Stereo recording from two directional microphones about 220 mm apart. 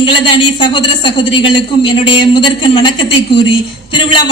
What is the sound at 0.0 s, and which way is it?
A woman's voice, 20° left (ahead or behind).